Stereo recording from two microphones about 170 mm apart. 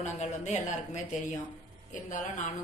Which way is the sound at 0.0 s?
45° left (ahead or behind).